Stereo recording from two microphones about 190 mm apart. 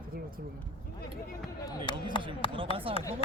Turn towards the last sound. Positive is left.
turn(degrees=-30)  # may be behind; listen again after turning